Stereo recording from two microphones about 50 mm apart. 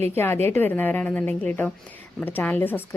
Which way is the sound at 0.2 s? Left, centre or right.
Left.